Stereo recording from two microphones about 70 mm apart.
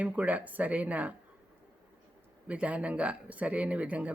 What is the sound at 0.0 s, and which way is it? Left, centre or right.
Speech, right.